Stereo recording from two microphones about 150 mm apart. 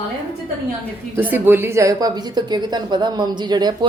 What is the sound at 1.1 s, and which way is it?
Speech, 15° right (ahead or behind).